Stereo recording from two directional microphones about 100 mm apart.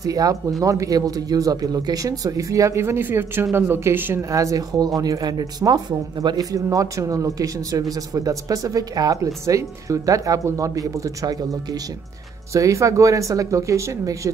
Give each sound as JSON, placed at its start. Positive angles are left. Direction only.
{"t": 0.0, "sound": "speech", "side_deg": -35}